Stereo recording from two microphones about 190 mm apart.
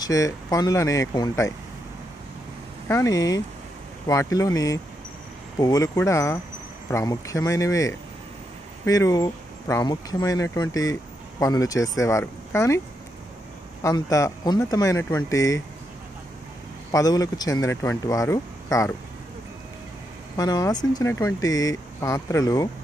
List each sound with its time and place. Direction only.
0.0 s speech: 15° left (ahead or behind)
2.9 s speech: 15° left (ahead or behind)
13.8 s speech: 20° left (ahead or behind)
16.9 s speech: 20° left (ahead or behind)
20.3 s speech: 20° left (ahead or behind)